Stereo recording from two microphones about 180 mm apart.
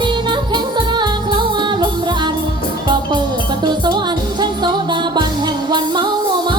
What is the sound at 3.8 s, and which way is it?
Music, 25° right (ahead or behind).